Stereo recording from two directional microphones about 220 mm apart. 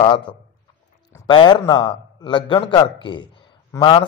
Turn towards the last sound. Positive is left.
turn(degrees=20)  # may be behind; listen again after turning